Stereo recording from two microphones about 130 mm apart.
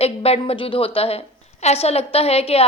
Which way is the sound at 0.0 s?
50° left (ahead or behind).